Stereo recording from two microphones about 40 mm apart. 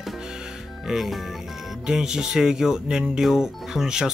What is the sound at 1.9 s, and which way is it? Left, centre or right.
Speech, centre.